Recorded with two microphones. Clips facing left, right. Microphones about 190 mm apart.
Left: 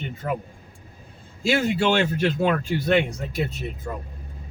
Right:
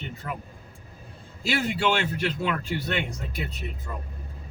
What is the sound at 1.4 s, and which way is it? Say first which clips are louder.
Speech: left 4 dB; 45° left (ahead or behind).